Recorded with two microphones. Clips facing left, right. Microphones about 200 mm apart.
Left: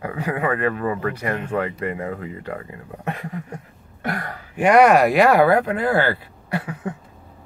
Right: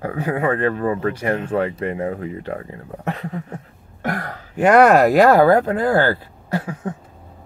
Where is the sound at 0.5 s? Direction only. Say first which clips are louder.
Right 2 dB; 30° right (ahead or behind).